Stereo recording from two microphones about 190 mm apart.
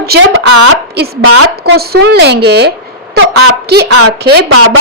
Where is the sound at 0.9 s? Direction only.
55° right (ahead or behind).